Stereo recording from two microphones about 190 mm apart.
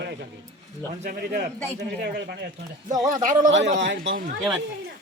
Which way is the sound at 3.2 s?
40° right (ahead or behind).